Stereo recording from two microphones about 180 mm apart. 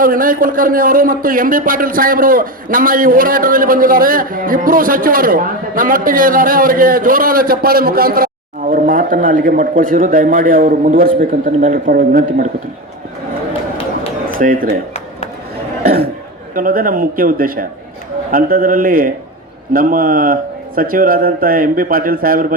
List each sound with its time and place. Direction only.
0.0 s speech: 50° right (ahead or behind)
14.3 s speech: 50° right (ahead or behind)
16.6 s speech: 50° right (ahead or behind)